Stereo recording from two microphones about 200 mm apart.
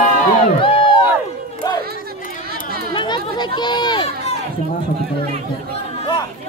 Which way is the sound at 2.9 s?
25° left (ahead or behind).